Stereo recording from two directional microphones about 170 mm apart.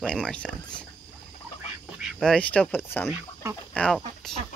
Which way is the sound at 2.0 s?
Centre (ahead or behind).